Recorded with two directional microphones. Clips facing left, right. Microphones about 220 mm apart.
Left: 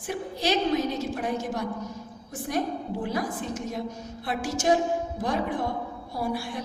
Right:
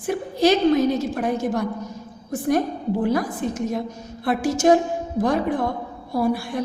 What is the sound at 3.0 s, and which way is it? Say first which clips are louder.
A woman's voice: right 6 dB; 50° right (ahead or behind).